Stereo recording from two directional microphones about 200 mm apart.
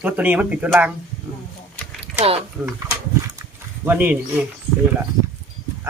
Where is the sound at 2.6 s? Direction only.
15° right (ahead or behind).